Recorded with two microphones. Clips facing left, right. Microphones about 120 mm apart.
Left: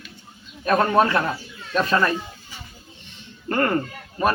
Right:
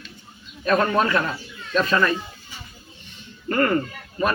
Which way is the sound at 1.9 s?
35° left (ahead or behind).